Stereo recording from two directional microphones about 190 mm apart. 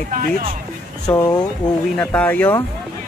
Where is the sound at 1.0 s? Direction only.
20° left (ahead or behind).